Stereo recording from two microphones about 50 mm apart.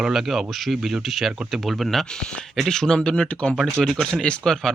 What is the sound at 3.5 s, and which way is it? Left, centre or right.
Speech, centre.